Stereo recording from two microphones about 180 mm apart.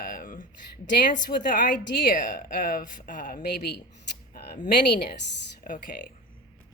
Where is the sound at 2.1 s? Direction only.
50° left (ahead or behind).